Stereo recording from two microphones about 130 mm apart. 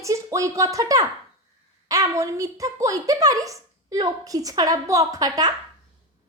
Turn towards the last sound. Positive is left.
turn(degrees=-30)  # may be behind; listen again after turning